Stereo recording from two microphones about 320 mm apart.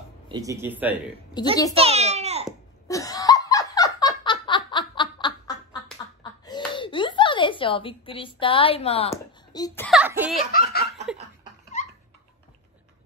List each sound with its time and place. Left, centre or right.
0.3 s speech: centre
1.7 s a child's voice: centre
2.9 s laughter: centre
6.4 s a sound: centre
9.8 s a child's voice: centre
10.5 s laughter: left